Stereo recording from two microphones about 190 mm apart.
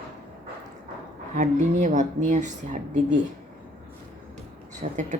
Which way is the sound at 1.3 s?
40° right (ahead or behind).